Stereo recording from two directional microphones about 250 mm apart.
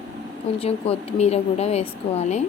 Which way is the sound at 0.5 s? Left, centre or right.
Left.